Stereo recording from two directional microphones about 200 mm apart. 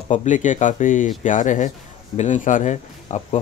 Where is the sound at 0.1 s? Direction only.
35° left (ahead or behind).